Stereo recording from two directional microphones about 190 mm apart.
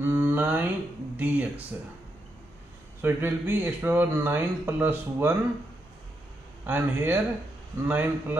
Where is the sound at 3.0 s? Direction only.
10° right (ahead or behind).